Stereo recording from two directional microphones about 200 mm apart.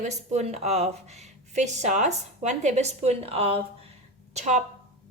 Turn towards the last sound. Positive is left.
turn(degrees=-35)  # may be behind; listen again after turning